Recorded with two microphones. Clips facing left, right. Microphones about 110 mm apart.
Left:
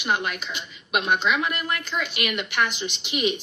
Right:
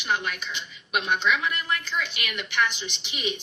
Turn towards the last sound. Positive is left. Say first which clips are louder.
# left 6 dB
turn(degrees=50)  # may be behind; listen again after turning